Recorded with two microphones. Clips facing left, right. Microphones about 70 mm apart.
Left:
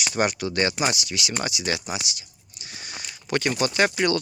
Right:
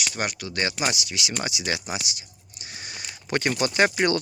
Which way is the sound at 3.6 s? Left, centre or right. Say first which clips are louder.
Right 1 dB; right.